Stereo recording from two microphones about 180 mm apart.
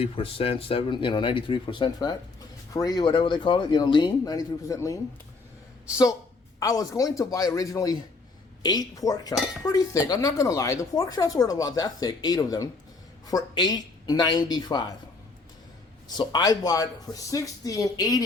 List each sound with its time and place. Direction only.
0.0 s speech: 30° left (ahead or behind)
6.6 s speech: 20° left (ahead or behind)
16.0 s speech: 20° left (ahead or behind)